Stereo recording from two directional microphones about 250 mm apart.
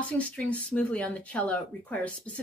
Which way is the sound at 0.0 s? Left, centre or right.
Centre.